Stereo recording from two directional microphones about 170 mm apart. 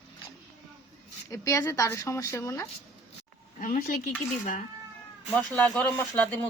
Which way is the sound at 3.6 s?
55° left (ahead or behind).